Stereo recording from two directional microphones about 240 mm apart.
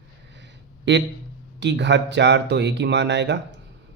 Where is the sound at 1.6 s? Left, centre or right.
Right.